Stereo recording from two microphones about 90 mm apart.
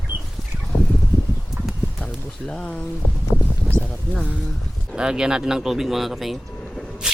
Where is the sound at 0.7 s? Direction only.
15° left (ahead or behind).